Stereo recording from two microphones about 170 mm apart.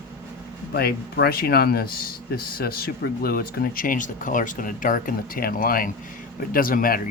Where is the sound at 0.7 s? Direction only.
70° left (ahead or behind).